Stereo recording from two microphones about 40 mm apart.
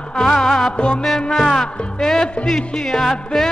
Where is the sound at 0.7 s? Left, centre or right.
Left.